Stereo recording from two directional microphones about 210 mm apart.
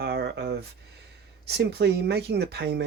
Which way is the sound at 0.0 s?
50° right (ahead or behind).